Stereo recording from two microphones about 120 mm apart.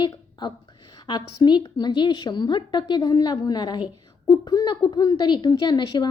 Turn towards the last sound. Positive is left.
turn(degrees=35)  # may be behind; listen again after turning